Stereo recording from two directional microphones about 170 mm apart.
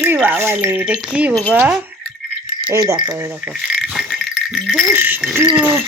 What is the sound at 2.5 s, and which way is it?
Keys jangling, 25° right (ahead or behind).